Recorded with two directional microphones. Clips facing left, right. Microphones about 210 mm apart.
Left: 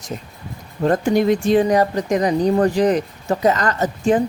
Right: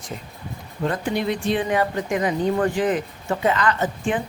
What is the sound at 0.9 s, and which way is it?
Speech, 45° left (ahead or behind).